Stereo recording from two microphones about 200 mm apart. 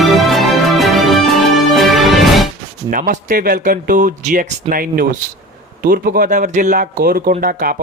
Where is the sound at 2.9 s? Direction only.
40° right (ahead or behind).